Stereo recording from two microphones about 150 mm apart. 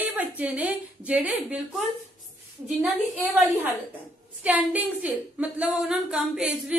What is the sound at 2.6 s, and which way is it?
Speech, 5° right (ahead or behind).